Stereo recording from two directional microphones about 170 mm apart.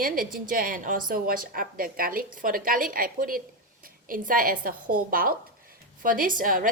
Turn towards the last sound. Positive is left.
turn(degrees=-55)  # may be behind; listen again after turning